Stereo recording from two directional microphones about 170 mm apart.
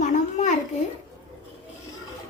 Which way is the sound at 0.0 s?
45° left (ahead or behind).